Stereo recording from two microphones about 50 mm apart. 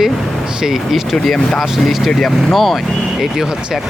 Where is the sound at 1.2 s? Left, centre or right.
Centre.